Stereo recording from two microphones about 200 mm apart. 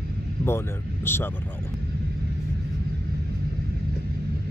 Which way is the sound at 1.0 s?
10° left (ahead or behind).